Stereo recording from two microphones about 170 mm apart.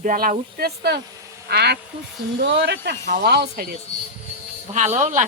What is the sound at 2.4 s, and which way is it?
Speech, 85° right.